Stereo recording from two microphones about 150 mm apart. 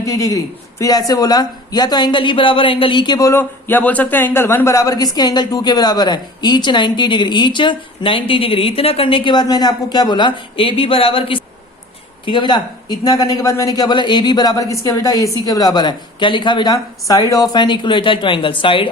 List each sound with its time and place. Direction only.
0.0 s speech: 20° left (ahead or behind)